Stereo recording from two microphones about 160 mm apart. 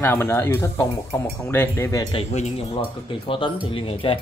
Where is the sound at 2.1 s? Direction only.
40° left (ahead or behind).